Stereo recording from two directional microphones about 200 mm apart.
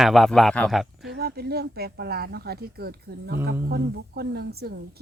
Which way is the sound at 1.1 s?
50° right (ahead or behind).